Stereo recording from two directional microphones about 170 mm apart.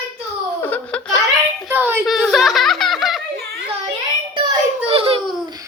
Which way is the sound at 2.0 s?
Centre (ahead or behind).